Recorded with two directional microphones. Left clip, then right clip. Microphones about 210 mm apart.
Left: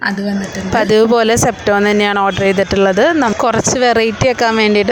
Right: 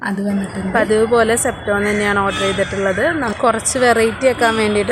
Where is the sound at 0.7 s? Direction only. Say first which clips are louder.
Left 3 dB; 50° left (ahead or behind).